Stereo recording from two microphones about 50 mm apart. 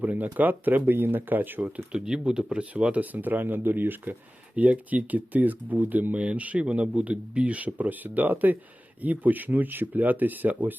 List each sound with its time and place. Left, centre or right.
0.0 s speech: right
1.6 s speech: centre; by 4.1 s right
4.5 s speech: right